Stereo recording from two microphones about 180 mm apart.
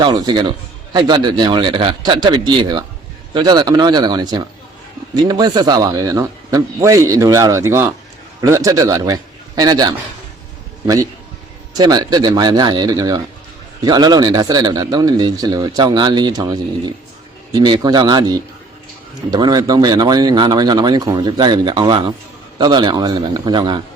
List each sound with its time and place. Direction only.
0.0 s a man's voice: 25° right (ahead or behind)
11.8 s speech: 20° right (ahead or behind)